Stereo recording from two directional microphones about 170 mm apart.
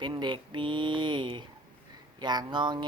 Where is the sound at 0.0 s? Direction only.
25° right (ahead or behind).